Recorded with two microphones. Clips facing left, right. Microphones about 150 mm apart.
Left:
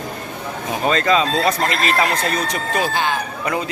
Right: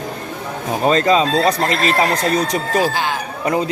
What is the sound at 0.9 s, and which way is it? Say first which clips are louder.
Speech: right 3 dB; 35° right (ahead or behind).